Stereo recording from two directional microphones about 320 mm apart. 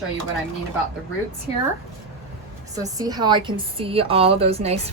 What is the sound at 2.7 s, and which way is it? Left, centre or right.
A woman's voice, centre.